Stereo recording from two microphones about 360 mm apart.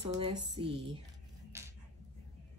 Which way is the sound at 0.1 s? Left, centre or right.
Centre.